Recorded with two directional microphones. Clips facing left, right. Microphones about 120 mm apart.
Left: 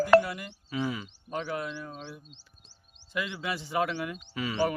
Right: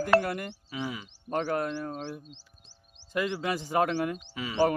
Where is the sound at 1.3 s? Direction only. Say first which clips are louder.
Right 5 dB; 50° right (ahead or behind).